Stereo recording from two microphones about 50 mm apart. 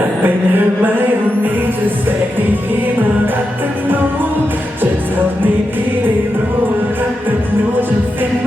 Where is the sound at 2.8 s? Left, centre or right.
Right.